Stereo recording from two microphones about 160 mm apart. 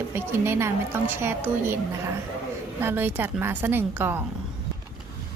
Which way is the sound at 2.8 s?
15° right (ahead or behind).